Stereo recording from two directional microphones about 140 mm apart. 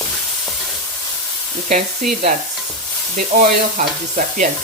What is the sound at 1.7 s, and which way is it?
Speech, 70° right (ahead or behind).